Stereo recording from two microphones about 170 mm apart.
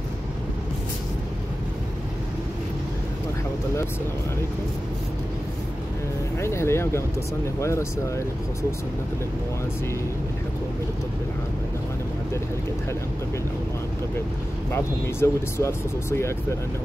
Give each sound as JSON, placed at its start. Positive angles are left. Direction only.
{"t": 6.4, "sound": "speech", "side_deg": 15}
{"t": 14.7, "sound": "speech", "side_deg": 15}